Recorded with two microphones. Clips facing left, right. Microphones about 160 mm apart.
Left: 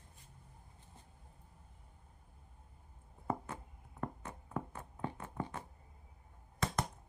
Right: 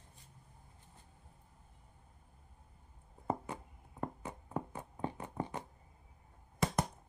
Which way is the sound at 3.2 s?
20° right (ahead or behind).